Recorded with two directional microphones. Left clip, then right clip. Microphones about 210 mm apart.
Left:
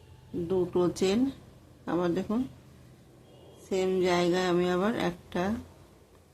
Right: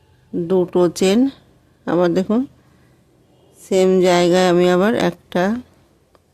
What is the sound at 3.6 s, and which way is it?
Speech, 55° right (ahead or behind).